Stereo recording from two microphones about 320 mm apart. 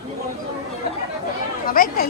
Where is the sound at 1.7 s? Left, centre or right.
Left.